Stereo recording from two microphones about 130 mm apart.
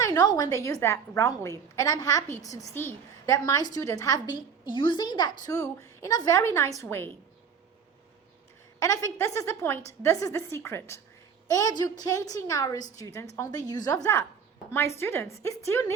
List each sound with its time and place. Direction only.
0.0 s a woman's voice: 30° left (ahead or behind)
8.8 s a woman's voice: 25° left (ahead or behind)